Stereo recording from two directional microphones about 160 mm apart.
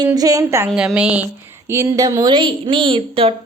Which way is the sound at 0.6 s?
5° right (ahead or behind).